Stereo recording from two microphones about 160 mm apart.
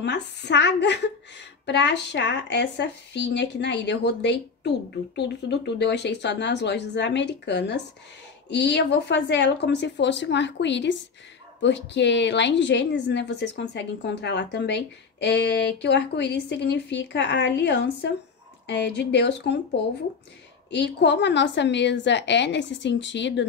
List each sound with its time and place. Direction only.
0.0 s a woman's voice: 90° left